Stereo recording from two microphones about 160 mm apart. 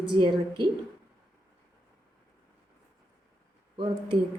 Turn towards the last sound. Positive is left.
turn(degrees=-35)  # may be behind; listen again after turning